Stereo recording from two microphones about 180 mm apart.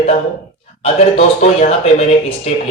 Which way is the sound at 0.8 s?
35° left (ahead or behind).